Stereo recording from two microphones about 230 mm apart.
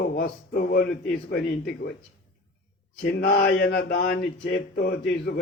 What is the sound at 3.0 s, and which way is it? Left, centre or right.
Speech, left.